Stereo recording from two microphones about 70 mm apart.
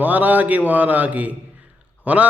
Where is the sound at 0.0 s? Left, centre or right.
Right.